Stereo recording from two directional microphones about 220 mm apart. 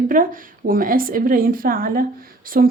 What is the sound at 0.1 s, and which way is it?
A woman's voice, 40° right (ahead or behind).